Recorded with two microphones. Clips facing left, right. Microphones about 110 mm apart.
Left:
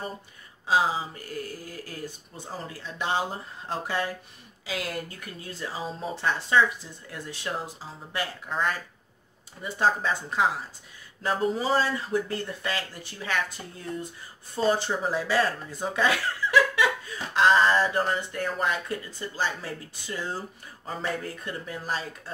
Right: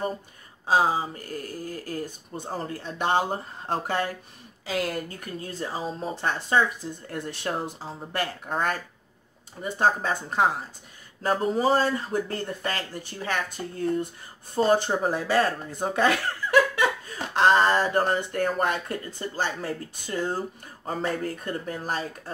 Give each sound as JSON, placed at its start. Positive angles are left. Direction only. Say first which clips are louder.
{"t": 0.7, "sound": "speech", "louder": "right 2 dB", "side_deg": -45}